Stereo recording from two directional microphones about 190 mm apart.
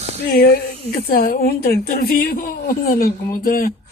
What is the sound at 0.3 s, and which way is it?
A woman's voice, 50° left (ahead or behind).